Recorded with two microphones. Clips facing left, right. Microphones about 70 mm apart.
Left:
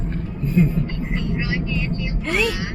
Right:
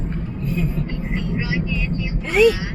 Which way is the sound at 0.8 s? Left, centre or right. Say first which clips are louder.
Even; centre.